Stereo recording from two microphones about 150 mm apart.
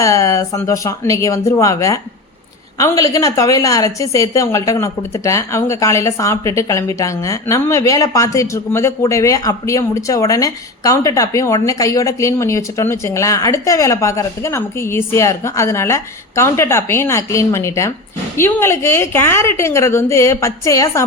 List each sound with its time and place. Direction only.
0.0 s a woman's voice: 20° left (ahead or behind)